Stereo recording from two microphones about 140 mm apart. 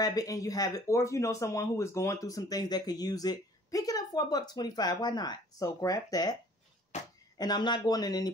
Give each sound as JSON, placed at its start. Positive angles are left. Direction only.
{"t": 0.0, "sound": "speech", "side_deg": 25}
{"t": 7.3, "sound": "speech", "side_deg": 30}